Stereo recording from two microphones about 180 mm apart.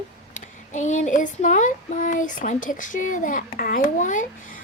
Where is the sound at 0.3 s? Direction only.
45° left (ahead or behind).